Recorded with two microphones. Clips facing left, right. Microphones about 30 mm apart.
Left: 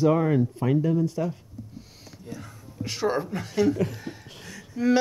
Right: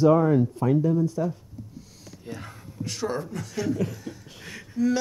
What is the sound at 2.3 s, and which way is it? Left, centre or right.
Speech, right.